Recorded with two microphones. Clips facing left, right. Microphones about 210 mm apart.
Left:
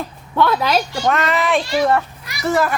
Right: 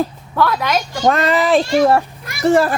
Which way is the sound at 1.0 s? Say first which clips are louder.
Right 7 dB; 35° right (ahead or behind).